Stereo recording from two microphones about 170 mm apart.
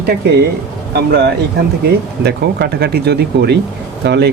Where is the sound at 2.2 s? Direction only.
75° right (ahead or behind).